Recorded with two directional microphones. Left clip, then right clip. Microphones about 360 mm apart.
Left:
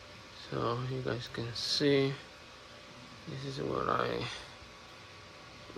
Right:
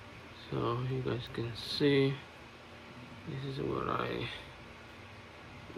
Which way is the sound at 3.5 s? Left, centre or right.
Centre.